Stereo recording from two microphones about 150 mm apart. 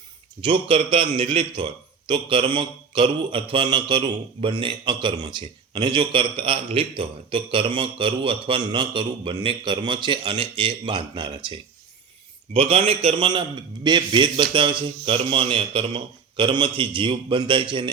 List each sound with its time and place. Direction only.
0.4 s a man's voice: 35° right (ahead or behind)
12.5 s a man's voice: 40° right (ahead or behind)